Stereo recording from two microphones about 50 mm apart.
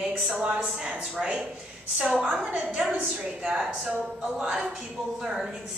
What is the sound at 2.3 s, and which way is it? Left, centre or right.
Speech, right.